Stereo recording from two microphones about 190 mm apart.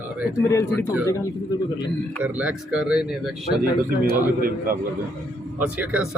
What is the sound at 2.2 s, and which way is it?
Speech, 5° right (ahead or behind).